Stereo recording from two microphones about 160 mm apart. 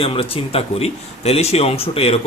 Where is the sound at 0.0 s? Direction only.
35° left (ahead or behind).